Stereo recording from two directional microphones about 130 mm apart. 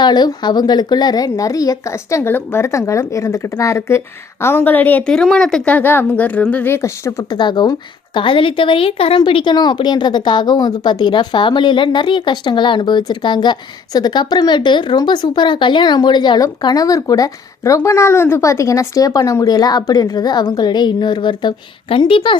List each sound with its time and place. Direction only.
0.0 s a woman's voice: 35° left (ahead or behind)
7.3 s a woman's voice: 35° left (ahead or behind)